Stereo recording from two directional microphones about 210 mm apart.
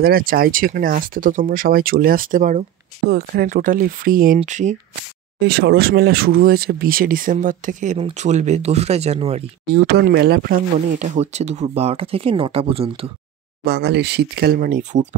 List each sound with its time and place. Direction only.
0.0 s speech: 45° right (ahead or behind)
5.4 s speech: 50° right (ahead or behind); by 9.5 s 30° right (ahead or behind)
9.8 s speech: 50° right (ahead or behind); by 13.1 s 25° right (ahead or behind)
13.7 s speech: 50° right (ahead or behind); by 15.0 s 35° right (ahead or behind)